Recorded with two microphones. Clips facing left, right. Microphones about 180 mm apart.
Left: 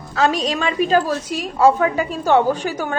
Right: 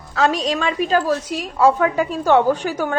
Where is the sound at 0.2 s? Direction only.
10° left (ahead or behind).